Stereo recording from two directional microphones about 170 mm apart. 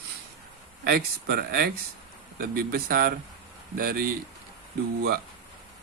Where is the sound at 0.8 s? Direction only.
65° right (ahead or behind).